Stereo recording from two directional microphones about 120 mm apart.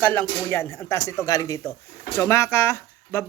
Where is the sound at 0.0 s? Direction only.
15° left (ahead or behind).